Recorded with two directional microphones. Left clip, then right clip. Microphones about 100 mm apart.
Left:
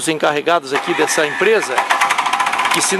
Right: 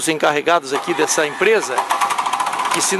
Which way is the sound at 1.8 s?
20° left (ahead or behind).